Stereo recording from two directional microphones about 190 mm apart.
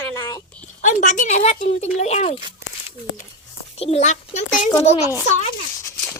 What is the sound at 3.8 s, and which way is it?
A child's voice, 35° left (ahead or behind).